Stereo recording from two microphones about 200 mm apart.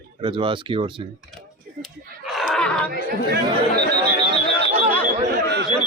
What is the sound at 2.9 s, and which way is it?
Speech, 50° right (ahead or behind).